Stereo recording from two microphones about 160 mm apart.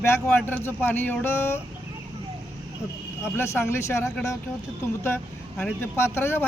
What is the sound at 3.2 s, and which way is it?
Speech, 15° left (ahead or behind).